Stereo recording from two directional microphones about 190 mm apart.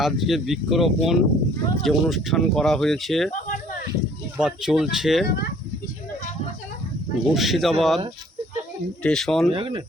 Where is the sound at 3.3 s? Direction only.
45° left (ahead or behind).